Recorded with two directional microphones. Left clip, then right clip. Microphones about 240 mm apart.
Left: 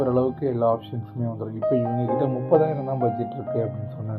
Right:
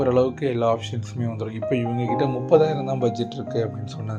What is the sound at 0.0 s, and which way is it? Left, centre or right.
Speech, right.